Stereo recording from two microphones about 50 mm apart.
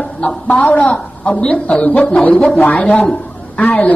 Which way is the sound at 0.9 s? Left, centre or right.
Left.